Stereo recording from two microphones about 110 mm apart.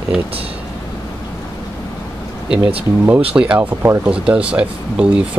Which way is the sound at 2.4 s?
5° right (ahead or behind).